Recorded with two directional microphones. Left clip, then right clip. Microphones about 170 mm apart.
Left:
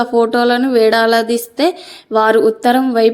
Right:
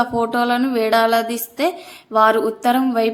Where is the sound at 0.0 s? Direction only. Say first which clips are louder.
Left 6 dB; 20° left (ahead or behind).